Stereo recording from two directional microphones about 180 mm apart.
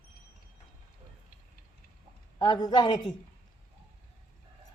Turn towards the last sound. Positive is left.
turn(degrees=25)  # may be behind; listen again after turning